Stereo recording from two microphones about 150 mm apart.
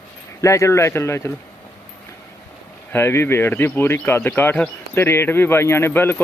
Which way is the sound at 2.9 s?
15° left (ahead or behind).